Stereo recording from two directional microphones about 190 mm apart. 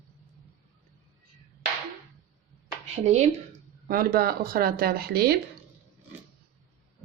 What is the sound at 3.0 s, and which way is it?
Speech, 35° right (ahead or behind).